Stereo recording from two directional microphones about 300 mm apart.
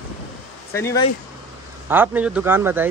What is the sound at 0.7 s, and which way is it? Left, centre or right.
Speech, centre.